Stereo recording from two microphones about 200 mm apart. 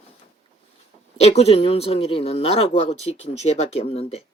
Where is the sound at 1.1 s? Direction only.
30° left (ahead or behind).